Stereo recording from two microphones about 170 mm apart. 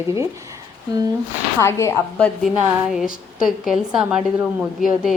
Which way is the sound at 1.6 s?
15° left (ahead or behind).